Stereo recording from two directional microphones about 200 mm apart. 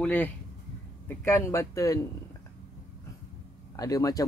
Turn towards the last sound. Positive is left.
turn(degrees=15)  # may be behind; listen again after turning